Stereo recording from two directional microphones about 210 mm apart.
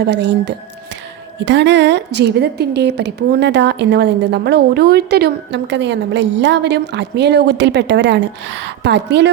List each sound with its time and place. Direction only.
0.0 s a woman's voice: 55° right (ahead or behind)